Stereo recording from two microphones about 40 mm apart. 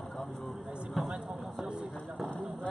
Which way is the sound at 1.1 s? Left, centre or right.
Centre.